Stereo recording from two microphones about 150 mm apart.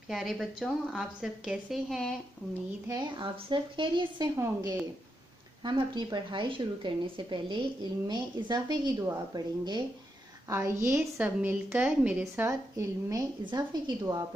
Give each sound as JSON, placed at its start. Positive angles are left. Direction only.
{"t": 0.1, "sound": "a woman's voice", "side_deg": 0}
{"t": 2.9, "sound": "a woman's voice", "side_deg": -30}
{"t": 4.4, "sound": "a woman's voice", "side_deg": -15}
{"t": 5.6, "sound": "a woman's voice", "side_deg": -30}
{"t": 11.0, "sound": "a woman's voice", "side_deg": -10}